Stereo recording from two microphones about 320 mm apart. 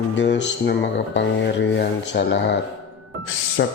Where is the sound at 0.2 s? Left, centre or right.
Left.